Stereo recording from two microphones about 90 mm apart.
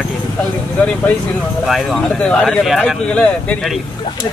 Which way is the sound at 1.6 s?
Centre (ahead or behind).